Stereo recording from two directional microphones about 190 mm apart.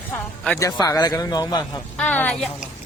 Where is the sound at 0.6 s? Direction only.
20° left (ahead or behind).